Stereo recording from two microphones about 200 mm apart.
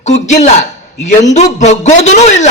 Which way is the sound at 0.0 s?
35° left (ahead or behind).